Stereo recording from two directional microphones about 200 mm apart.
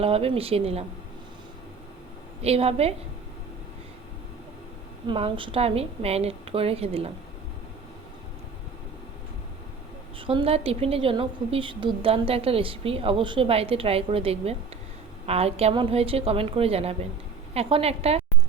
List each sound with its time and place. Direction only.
0.0 s a woman's voice: 30° right (ahead or behind)
2.4 s a woman's voice: 30° right (ahead or behind)
5.0 s a woman's voice: 25° right (ahead or behind)
10.2 s a woman's voice: 25° right (ahead or behind)